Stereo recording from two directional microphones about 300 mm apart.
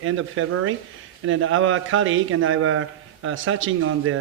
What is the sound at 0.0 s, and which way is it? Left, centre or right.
A man's voice, right.